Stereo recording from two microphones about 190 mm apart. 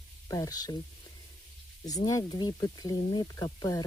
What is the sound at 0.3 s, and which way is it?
Speech, 15° left (ahead or behind).